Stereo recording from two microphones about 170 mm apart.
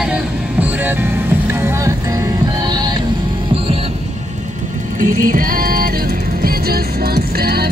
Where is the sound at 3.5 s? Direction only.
35° right (ahead or behind).